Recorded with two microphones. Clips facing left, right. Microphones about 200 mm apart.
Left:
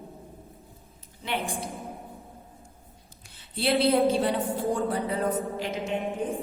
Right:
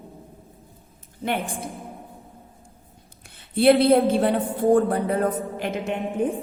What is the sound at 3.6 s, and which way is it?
A woman's voice, 55° right (ahead or behind).